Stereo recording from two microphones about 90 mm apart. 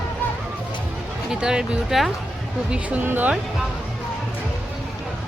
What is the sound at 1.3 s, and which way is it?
Speech, 5° right (ahead or behind).